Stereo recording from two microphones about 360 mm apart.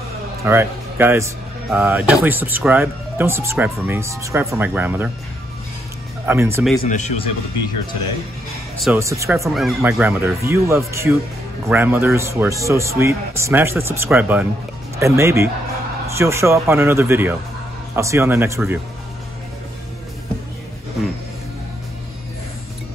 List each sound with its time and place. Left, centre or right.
0.4 s speech: centre
6.2 s speech: centre
6.8 s speech: centre
8.7 s speech: centre